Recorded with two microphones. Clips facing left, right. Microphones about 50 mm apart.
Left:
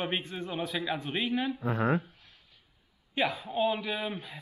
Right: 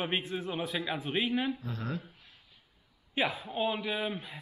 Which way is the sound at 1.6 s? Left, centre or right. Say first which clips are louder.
Left 10 dB; left.